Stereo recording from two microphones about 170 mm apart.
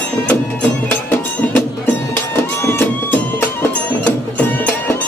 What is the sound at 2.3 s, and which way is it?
Music, 15° left (ahead or behind).